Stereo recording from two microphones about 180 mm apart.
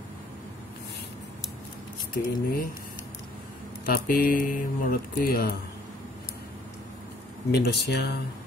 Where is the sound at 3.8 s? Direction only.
55° left (ahead or behind).